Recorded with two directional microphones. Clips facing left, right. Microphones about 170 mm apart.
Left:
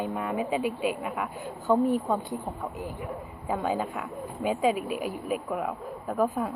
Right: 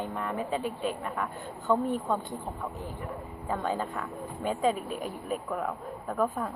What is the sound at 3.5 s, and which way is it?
A woman's voice, 10° left (ahead or behind).